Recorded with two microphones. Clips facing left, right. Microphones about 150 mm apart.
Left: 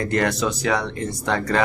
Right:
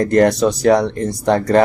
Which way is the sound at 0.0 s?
40° right (ahead or behind).